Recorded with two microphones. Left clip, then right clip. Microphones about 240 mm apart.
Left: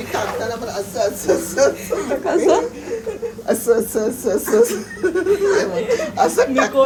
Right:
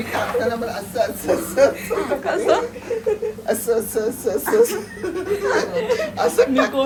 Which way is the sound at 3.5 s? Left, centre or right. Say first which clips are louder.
Left 4 dB; left.